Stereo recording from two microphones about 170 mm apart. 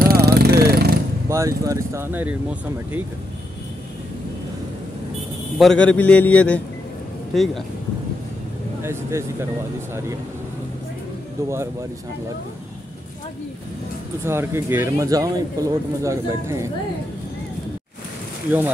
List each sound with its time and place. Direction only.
0.0 s vehicle: 65° right (ahead or behind)
1.3 s speech: 20° right (ahead or behind)
5.6 s a man's voice: 5° left (ahead or behind)
8.8 s speech: 15° right (ahead or behind)
11.4 s speech: 15° right (ahead or behind)
14.2 s speech: 15° right (ahead or behind)